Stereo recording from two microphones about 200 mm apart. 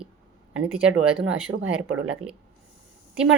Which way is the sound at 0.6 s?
5° right (ahead or behind).